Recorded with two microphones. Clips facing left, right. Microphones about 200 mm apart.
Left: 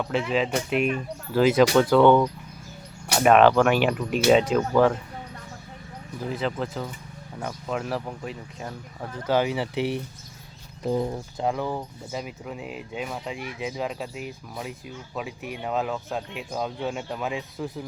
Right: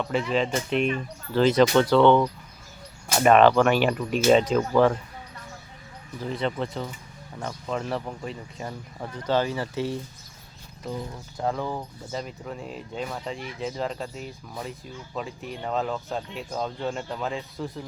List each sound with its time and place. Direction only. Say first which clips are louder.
0.1 s speech: left 1 dB; 5° left (ahead or behind)
6.2 s speech: even; 5° left (ahead or behind)
9.3 s speech: left 2 dB; 15° left (ahead or behind)
10.8 s speech: left 8 dB; 45° left (ahead or behind)
11.3 s speech: even; 15° left (ahead or behind)